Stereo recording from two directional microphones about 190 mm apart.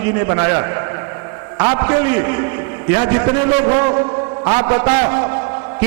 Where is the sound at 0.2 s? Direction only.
20° right (ahead or behind).